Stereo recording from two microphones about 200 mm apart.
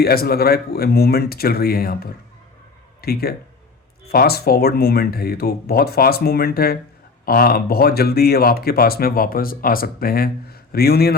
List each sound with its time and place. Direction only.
0.0 s speech: 50° left (ahead or behind)